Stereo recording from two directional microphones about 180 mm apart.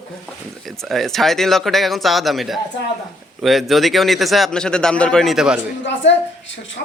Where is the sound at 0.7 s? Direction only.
Centre (ahead or behind).